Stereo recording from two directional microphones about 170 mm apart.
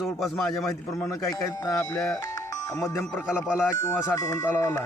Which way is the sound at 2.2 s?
20° left (ahead or behind).